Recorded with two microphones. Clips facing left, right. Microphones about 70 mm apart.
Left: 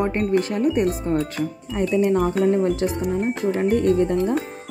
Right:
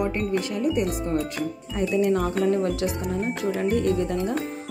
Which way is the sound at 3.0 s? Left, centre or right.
Centre.